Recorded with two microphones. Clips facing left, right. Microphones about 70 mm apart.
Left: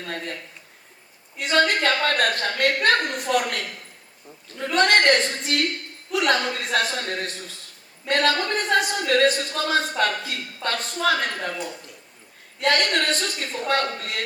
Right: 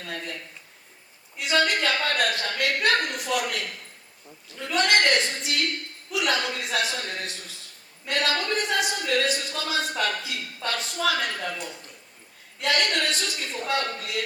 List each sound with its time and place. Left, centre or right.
0.0 s a woman's voice: left
1.4 s a woman's voice: left
12.6 s a woman's voice: left